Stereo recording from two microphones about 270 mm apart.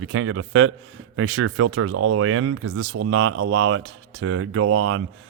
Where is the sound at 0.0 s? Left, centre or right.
Right.